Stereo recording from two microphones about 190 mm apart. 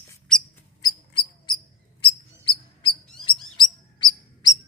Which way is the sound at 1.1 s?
25° left (ahead or behind).